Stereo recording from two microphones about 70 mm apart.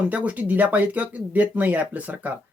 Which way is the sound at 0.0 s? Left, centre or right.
Right.